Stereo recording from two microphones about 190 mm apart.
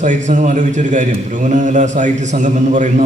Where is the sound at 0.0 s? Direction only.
40° right (ahead or behind).